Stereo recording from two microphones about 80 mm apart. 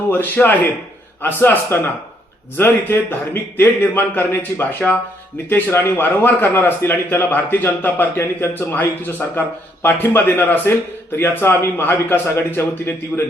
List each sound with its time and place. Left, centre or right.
0.1 s a man's voice: left